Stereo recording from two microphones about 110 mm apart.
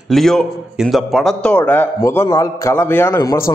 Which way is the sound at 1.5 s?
15° left (ahead or behind).